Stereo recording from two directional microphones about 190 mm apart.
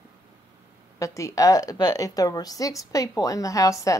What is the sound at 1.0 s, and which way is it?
A woman's voice, 15° left (ahead or behind).